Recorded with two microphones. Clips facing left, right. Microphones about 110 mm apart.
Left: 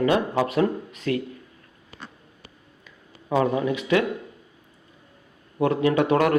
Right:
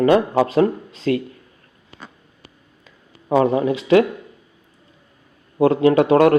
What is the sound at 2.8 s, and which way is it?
Speech, 35° right (ahead or behind).